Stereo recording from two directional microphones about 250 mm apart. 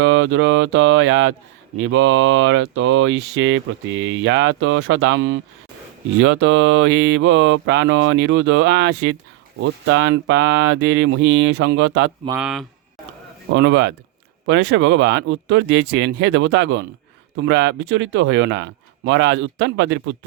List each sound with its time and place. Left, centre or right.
0.0 s speech: right
12.4 s speech: centre
13.5 s speech: right